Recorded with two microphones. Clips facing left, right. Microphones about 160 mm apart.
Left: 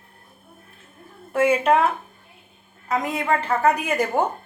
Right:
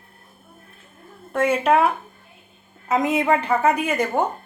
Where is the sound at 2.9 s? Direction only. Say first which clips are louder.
Right 4 dB; 20° right (ahead or behind).